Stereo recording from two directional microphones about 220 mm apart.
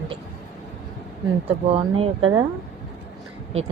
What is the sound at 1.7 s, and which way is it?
Speech, 25° right (ahead or behind).